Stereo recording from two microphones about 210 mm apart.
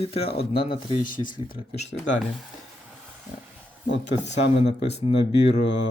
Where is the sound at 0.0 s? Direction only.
25° left (ahead or behind).